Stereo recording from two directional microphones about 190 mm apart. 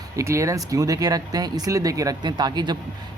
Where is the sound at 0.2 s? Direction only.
15° right (ahead or behind).